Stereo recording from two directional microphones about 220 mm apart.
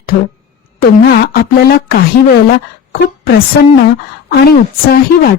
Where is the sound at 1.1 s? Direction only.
45° left (ahead or behind).